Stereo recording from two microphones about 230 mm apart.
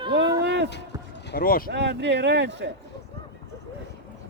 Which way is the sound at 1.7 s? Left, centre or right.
Right.